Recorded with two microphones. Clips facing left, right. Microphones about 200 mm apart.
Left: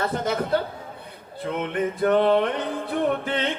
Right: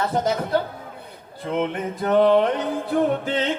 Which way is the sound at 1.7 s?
55° left (ahead or behind).